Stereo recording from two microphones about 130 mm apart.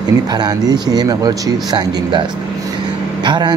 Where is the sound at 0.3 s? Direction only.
30° right (ahead or behind).